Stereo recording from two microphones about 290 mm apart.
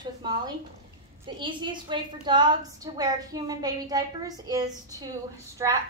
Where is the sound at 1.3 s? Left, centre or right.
Centre.